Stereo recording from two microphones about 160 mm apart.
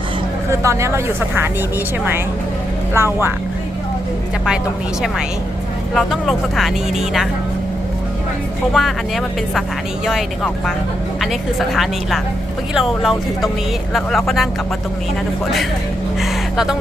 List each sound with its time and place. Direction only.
0.6 s speech: 20° right (ahead or behind)
2.9 s speech: 15° right (ahead or behind)
5.9 s a woman's voice: centre (ahead or behind)
8.7 s a woman's voice: centre (ahead or behind)